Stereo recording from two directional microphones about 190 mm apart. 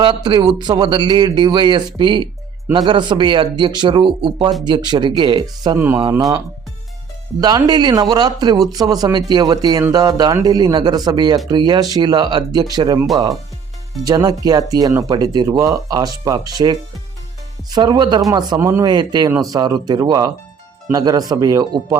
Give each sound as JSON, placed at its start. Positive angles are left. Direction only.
{"t": 0.0, "sound": "speech", "side_deg": -25}
{"t": 7.4, "sound": "speech", "side_deg": -20}
{"t": 14.0, "sound": "speech", "side_deg": -20}